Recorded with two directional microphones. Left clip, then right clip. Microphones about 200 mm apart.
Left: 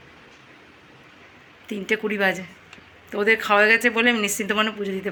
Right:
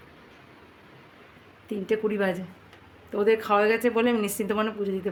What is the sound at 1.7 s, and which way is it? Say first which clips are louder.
Speech: left 2 dB; 5° right (ahead or behind).